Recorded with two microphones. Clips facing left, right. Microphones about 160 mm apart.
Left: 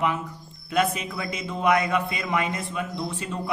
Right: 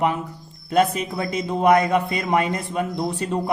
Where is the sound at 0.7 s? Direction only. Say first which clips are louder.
Right 5 dB; 35° right (ahead or behind).